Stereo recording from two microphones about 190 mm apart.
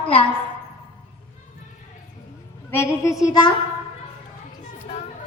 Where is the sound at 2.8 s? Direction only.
15° left (ahead or behind).